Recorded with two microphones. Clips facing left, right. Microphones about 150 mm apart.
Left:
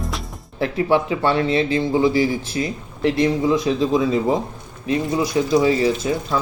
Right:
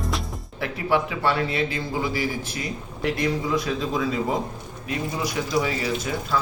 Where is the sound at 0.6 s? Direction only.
30° left (ahead or behind).